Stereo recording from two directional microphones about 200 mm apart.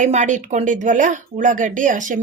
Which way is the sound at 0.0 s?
35° right (ahead or behind).